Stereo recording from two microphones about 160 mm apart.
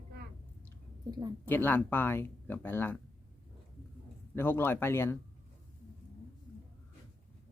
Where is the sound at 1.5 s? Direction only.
10° left (ahead or behind).